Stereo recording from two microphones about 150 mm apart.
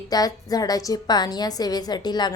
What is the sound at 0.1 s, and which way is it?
A woman's voice, 25° left (ahead or behind).